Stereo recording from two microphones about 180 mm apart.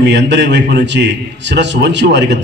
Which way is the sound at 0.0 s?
75° right (ahead or behind).